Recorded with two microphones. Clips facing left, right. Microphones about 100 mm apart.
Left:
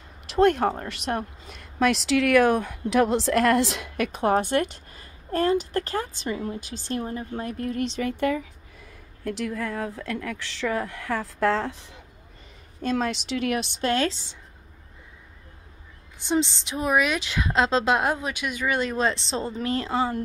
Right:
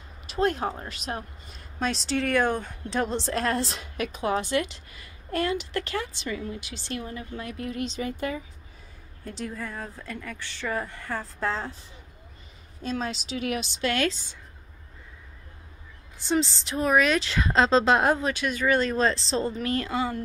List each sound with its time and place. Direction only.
0.3 s a woman's voice: 65° left (ahead or behind); by 3.9 s 85° left
3.9 s a woman's voice: 55° left (ahead or behind)
9.2 s a woman's voice: 90° left; by 12.0 s 75° left (ahead or behind)
12.8 s speech: 60° left (ahead or behind)
13.8 s a woman's voice: 30° left (ahead or behind)
16.3 s a woman's voice: 20° left (ahead or behind)